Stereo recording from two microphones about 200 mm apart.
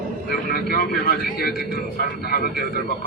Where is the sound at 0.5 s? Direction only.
50° left (ahead or behind).